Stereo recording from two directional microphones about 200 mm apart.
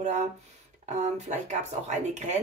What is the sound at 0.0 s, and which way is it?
Speech, 35° right (ahead or behind).